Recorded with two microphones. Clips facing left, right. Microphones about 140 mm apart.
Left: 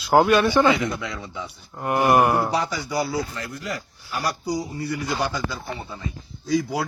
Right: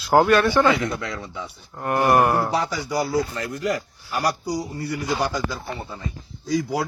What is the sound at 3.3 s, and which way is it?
Speech, 50° right (ahead or behind).